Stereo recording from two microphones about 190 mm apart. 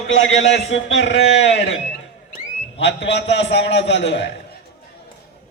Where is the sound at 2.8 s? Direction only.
65° left (ahead or behind).